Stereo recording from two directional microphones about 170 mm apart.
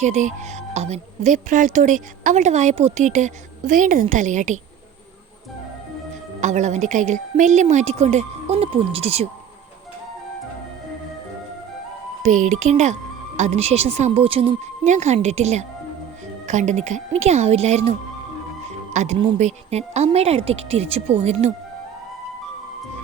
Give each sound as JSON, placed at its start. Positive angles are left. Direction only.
{"t": 0.0, "sound": "speech", "side_deg": -45}
{"t": 6.4, "sound": "speech", "side_deg": -45}
{"t": 12.2, "sound": "speech", "side_deg": -45}
{"t": 19.0, "sound": "speech", "side_deg": -45}